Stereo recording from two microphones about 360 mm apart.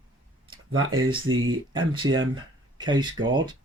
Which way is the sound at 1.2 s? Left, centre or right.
Right.